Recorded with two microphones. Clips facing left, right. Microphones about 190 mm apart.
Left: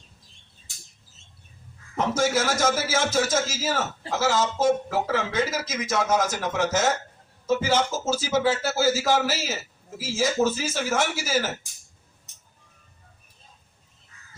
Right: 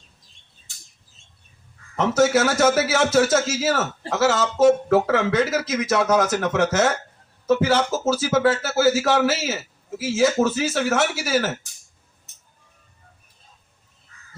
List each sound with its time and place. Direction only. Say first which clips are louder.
2.0 s a man's voice: right 5 dB; 70° right (ahead or behind)